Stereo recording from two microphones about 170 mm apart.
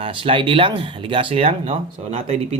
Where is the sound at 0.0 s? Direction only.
30° right (ahead or behind).